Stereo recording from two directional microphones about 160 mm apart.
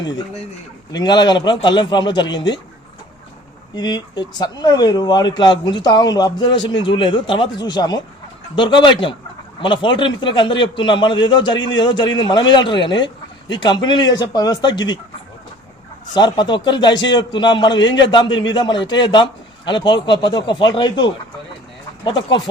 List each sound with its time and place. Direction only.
0.9 s speech: 25° left (ahead or behind)
3.8 s speech: 25° left (ahead or behind)
16.1 s speech: 25° left (ahead or behind)